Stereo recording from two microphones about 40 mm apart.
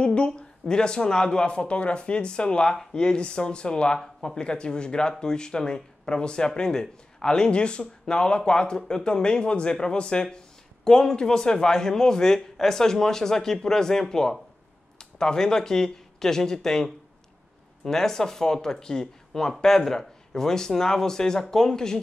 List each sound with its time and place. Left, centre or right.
0.0 s speech: left
4.0 s speech: centre
4.4 s speech: left